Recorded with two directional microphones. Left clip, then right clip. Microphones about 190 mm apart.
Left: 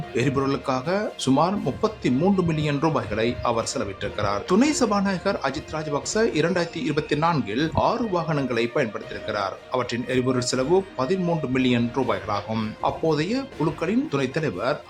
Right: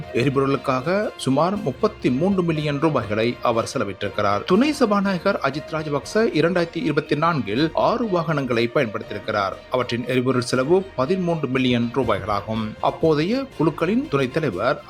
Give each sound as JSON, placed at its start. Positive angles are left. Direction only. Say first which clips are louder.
{"t": 0.1, "sound": "speech", "louder": "right 4 dB", "side_deg": -15}